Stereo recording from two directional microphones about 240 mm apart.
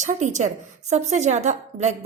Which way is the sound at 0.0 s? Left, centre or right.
Right.